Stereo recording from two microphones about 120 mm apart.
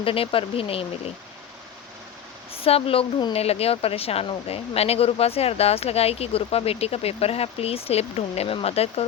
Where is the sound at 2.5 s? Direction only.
55° left (ahead or behind).